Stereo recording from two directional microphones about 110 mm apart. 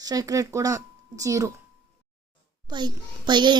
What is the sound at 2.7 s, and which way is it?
Speech, 40° right (ahead or behind).